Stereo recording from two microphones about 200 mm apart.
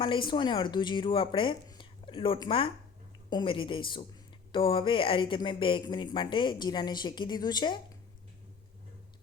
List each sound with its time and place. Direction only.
0.0 s speech: 25° left (ahead or behind)